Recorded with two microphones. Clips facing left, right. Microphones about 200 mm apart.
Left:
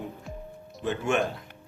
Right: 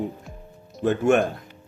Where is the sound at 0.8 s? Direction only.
50° right (ahead or behind).